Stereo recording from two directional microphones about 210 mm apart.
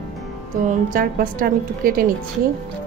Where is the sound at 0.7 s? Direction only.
40° right (ahead or behind).